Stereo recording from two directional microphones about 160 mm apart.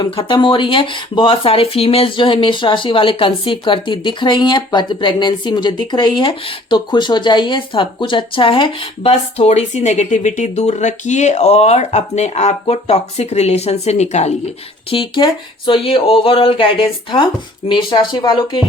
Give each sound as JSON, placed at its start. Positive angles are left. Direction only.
{"t": 0.0, "sound": "speech", "side_deg": 25}
{"t": 14.8, "sound": "speech", "side_deg": 30}